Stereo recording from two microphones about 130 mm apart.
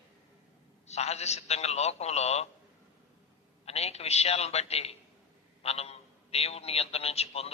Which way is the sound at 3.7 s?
55° left (ahead or behind).